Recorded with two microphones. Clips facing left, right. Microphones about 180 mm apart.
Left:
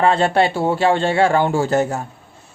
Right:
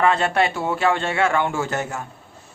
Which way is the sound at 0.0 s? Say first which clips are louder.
Left 4 dB; 30° left (ahead or behind).